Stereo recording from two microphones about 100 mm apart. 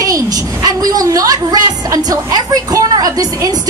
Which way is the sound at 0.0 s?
35° right (ahead or behind).